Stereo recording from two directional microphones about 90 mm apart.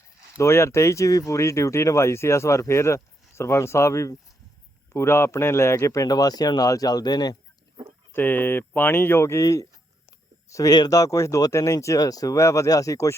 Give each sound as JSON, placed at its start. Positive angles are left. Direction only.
{"t": 0.3, "sound": "speech", "side_deg": 30}
{"t": 8.1, "sound": "speech", "side_deg": 20}